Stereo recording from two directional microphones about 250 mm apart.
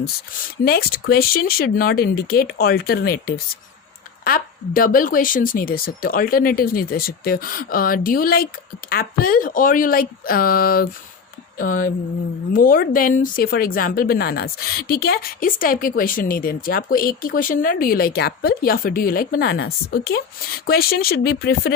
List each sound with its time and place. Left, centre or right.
0.6 s speech: left